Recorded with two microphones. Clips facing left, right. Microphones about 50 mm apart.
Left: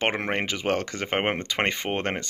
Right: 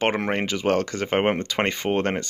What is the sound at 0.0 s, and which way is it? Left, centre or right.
Speech, centre.